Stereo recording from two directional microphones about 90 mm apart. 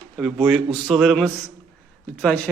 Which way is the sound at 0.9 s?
Centre (ahead or behind).